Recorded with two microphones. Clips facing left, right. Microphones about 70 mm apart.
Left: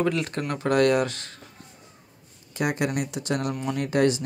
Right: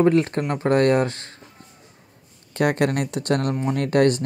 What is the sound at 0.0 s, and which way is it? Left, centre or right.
Speech, right.